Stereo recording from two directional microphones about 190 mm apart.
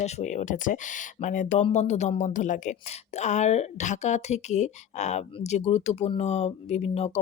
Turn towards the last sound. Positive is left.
turn(degrees=35)  # may be behind; listen again after turning